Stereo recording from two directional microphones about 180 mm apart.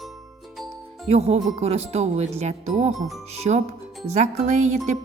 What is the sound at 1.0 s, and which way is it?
Speech, 35° right (ahead or behind).